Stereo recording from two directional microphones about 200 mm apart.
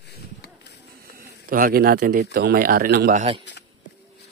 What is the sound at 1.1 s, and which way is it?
Speech, 45° right (ahead or behind).